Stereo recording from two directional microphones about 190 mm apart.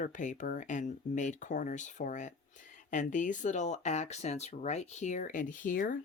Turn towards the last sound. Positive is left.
turn(degrees=45)  # may be behind; listen again after turning